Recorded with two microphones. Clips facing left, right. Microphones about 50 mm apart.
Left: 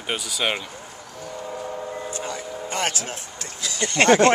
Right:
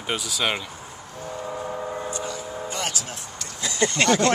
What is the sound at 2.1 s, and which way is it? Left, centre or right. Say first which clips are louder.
Vehicle: even; left.